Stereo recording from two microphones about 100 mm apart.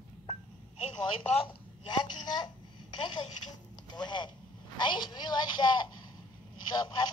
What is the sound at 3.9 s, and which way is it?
Speech, 50° left (ahead or behind).